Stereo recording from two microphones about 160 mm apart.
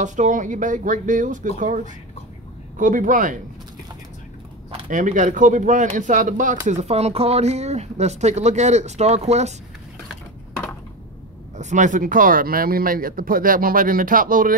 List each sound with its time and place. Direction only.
0.0 s speech: 50° right (ahead or behind)
2.8 s speech: 55° right (ahead or behind)
4.8 s speech: 55° right (ahead or behind)
11.5 s speech: 50° right (ahead or behind)